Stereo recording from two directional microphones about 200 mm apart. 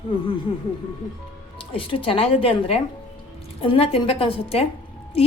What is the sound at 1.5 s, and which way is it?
A woman's voice, 25° left (ahead or behind).